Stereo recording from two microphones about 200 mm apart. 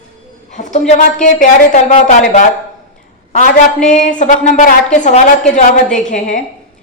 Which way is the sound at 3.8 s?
35° left (ahead or behind).